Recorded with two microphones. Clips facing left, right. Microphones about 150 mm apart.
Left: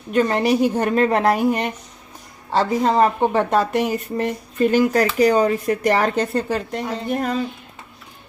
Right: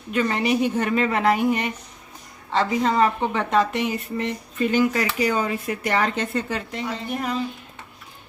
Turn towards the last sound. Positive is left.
turn(degrees=50)  # may be behind; listen again after turning